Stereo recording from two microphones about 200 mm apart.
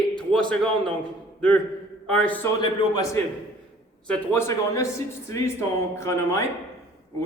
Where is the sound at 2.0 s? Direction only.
5° left (ahead or behind).